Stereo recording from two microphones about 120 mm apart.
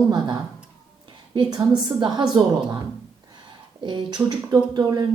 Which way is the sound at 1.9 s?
35° right (ahead or behind).